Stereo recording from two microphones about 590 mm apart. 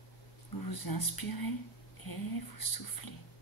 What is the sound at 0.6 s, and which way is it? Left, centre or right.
Speech, left.